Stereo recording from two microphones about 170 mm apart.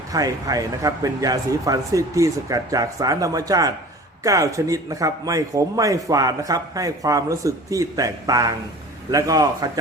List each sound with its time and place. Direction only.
0.1 s a man's voice: 20° right (ahead or behind)